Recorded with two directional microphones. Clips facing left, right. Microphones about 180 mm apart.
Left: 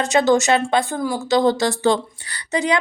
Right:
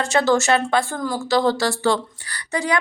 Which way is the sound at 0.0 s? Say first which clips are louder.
Left 2 dB; 20° left (ahead or behind).